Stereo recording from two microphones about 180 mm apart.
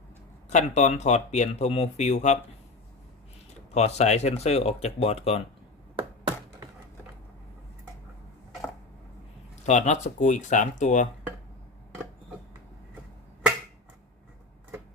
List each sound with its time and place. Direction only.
0.5 s speech: 40° left (ahead or behind)
3.8 s speech: 40° left (ahead or behind)
6.0 s tap: 30° right (ahead or behind)
9.6 s speech: 40° left (ahead or behind)